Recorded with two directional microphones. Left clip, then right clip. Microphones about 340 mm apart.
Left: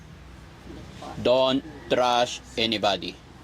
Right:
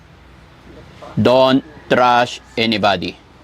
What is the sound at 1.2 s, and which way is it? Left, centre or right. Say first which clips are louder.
A man's voice: right 9 dB; right.